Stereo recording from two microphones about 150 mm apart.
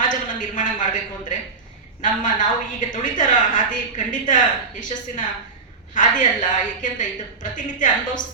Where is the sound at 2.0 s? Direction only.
60° left (ahead or behind).